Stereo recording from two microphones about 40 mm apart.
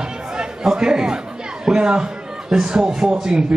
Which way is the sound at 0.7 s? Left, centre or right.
Right.